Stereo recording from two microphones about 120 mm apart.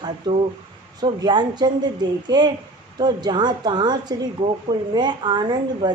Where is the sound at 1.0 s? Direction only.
35° right (ahead or behind).